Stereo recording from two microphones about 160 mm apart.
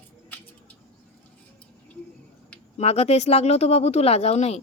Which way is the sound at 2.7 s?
40° left (ahead or behind).